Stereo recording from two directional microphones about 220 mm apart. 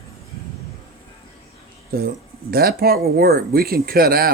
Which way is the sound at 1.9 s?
45° right (ahead or behind).